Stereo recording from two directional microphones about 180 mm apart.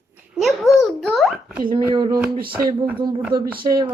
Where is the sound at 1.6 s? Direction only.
25° right (ahead or behind).